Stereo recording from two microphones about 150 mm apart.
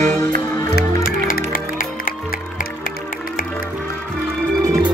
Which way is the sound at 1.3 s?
65° left (ahead or behind).